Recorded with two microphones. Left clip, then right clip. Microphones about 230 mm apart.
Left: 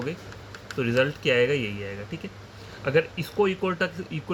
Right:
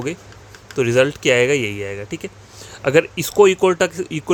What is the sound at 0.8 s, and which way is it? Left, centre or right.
Speech, right.